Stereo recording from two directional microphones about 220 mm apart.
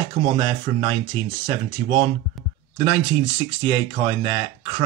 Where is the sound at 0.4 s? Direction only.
20° right (ahead or behind).